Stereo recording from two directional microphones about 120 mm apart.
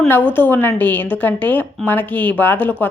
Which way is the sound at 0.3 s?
15° left (ahead or behind).